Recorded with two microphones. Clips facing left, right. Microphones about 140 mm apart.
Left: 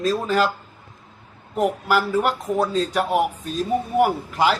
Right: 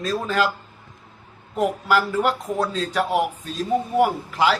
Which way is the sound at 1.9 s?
5° left (ahead or behind).